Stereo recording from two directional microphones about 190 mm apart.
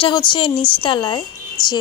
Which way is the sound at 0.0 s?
25° left (ahead or behind).